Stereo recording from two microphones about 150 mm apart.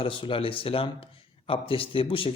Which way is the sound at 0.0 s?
35° left (ahead or behind).